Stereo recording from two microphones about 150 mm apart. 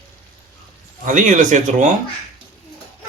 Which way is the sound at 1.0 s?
60° right (ahead or behind).